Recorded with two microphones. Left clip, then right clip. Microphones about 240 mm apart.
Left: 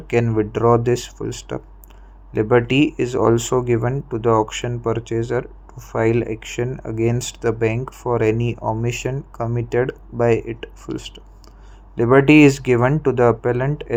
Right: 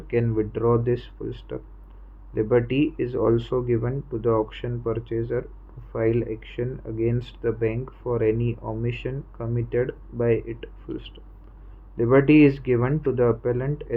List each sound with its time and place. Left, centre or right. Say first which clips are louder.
0.1 s speech: left 5 dB; centre